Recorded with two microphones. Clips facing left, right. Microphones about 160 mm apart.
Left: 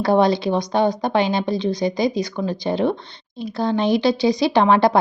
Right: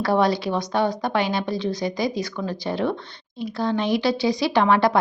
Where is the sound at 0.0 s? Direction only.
20° left (ahead or behind).